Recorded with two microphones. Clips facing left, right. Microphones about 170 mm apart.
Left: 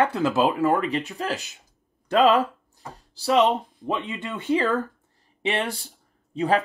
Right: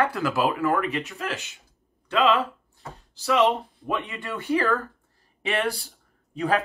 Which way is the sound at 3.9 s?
20° left (ahead or behind).